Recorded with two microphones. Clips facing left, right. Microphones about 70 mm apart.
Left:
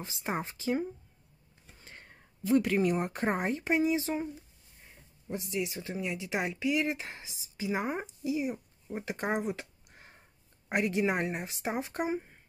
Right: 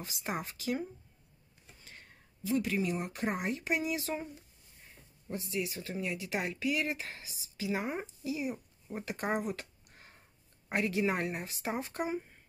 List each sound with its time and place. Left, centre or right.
0.0 s speech: left
1.8 s a sound: left
2.4 s speech: left; by 4.3 s centre
5.3 s speech: centre